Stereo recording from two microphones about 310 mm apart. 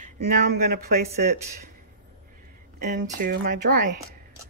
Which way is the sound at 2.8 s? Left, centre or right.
Right.